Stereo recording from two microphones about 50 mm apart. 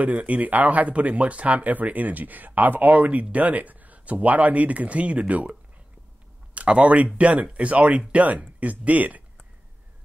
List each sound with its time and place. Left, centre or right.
0.0 s speech: right